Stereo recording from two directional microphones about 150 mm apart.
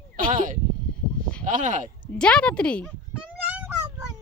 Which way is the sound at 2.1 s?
5° left (ahead or behind).